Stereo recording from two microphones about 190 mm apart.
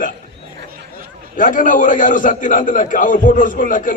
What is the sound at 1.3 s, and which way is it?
A man's voice, 45° left (ahead or behind).